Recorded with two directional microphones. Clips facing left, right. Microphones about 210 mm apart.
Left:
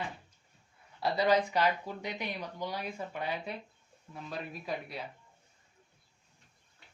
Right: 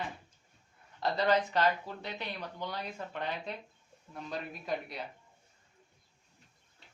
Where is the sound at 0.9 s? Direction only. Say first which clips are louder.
Left 1 dB; 10° left (ahead or behind).